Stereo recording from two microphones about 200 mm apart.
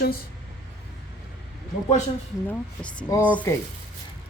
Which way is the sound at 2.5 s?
10° left (ahead or behind).